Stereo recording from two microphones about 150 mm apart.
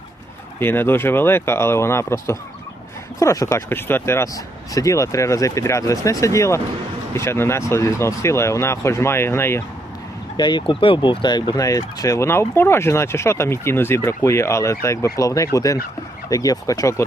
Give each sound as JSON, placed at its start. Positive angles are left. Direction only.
{"t": 0.6, "sound": "speech", "side_deg": 15}
{"t": 10.3, "sound": "speech", "side_deg": 30}